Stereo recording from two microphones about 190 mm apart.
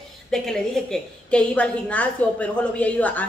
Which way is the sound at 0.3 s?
Centre (ahead or behind).